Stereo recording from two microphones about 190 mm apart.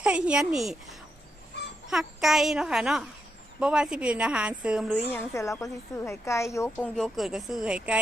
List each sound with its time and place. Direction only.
0.0 s a woman's voice: 5° right (ahead or behind)
5.0 s a woman's voice: 15° left (ahead or behind)
6.7 s a woman's voice: 5° left (ahead or behind)